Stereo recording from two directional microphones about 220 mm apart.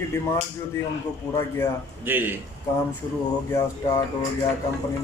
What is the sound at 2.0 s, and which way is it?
Speech, 10° right (ahead or behind).